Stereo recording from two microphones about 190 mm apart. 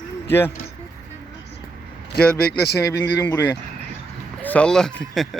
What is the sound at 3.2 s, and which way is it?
Speech, 15° left (ahead or behind).